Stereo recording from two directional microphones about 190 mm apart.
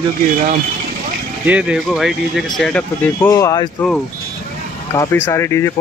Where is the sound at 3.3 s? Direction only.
20° left (ahead or behind).